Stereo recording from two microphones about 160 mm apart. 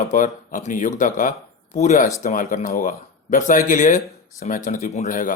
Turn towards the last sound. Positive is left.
turn(degrees=55)  # may be behind; listen again after turning